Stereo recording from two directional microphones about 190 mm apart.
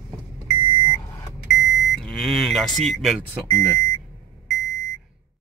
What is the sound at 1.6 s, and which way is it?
Speech, centre (ahead or behind).